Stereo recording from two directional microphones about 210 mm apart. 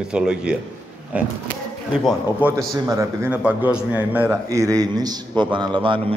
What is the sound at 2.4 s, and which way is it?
A man's voice, 10° right (ahead or behind).